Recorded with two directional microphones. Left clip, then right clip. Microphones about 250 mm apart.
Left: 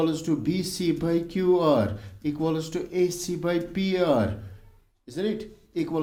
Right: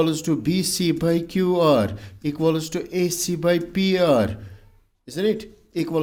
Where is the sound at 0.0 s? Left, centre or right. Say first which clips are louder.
Right 4 dB; right.